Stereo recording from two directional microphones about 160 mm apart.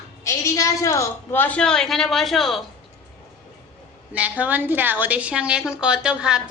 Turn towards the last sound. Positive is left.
turn(degrees=-5)  # may be behind; listen again after turning